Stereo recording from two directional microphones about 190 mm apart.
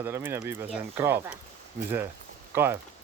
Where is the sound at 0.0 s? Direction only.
10° right (ahead or behind).